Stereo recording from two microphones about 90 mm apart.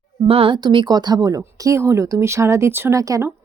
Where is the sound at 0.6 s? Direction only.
60° right (ahead or behind).